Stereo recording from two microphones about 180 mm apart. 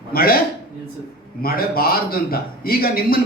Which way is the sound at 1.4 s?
55° left (ahead or behind).